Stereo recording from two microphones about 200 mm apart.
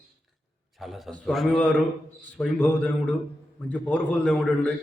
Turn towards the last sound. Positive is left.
turn(degrees=5)  # may be behind; listen again after turning